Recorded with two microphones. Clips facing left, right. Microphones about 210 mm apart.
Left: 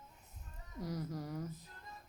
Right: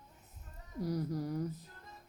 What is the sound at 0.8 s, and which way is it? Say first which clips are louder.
Speech: right 6 dB; 35° right (ahead or behind).